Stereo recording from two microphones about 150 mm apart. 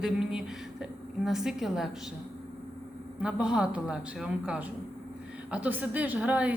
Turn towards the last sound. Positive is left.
turn(degrees=-10)  # may be behind; listen again after turning